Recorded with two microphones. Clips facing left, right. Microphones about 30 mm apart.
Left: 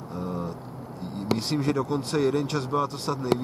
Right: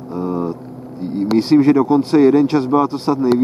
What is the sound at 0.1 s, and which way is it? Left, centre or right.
Vehicle, centre.